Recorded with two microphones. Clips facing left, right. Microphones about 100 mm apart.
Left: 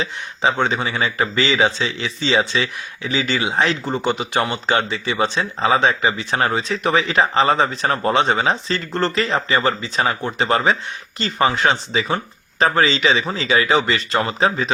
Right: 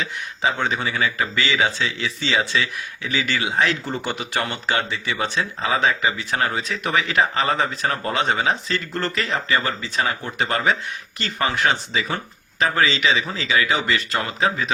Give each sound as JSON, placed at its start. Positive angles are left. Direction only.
{"t": 0.0, "sound": "speech", "side_deg": 25}
{"t": 5.6, "sound": "speech", "side_deg": 30}
{"t": 12.5, "sound": "speech", "side_deg": 35}